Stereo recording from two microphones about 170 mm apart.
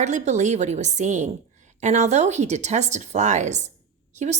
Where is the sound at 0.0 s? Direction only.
45° right (ahead or behind).